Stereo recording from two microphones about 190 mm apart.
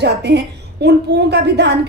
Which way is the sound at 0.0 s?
60° right (ahead or behind).